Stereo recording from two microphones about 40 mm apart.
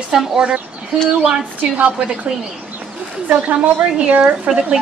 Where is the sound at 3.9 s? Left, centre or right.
Right.